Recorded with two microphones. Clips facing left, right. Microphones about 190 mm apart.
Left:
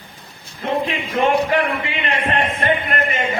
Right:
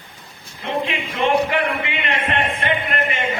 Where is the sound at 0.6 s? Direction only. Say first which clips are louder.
Left 2 dB; 40° left (ahead or behind).